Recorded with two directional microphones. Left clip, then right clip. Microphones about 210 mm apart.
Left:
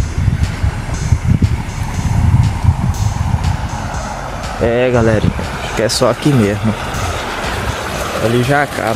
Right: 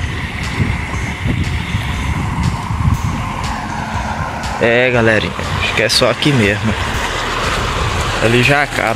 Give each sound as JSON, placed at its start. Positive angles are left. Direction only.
{"t": 4.6, "sound": "speech", "side_deg": 15}
{"t": 8.4, "sound": "speech", "side_deg": 10}